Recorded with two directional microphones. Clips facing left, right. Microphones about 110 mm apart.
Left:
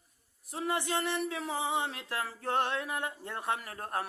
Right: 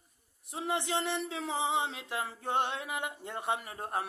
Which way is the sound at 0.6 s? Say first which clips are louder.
Even; 25° right (ahead or behind).